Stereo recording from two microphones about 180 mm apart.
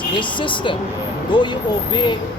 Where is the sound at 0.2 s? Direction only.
25° left (ahead or behind).